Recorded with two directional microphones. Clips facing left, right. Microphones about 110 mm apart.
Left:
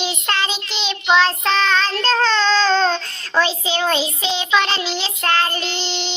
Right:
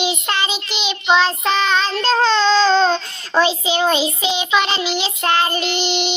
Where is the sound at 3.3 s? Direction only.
20° right (ahead or behind).